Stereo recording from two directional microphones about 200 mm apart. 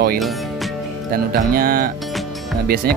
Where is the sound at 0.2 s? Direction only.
Centre (ahead or behind).